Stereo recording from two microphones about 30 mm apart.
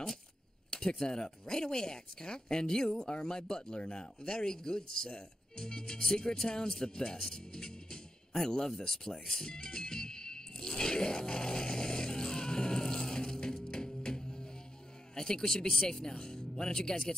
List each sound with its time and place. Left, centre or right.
0.7 s speech: centre
7.5 s music: left
15.1 s speech: left